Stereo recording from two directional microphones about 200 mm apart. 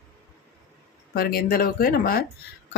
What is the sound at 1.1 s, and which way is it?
Speech, 50° left (ahead or behind).